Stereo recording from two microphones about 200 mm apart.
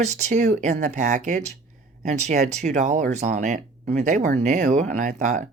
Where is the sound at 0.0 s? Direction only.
35° right (ahead or behind).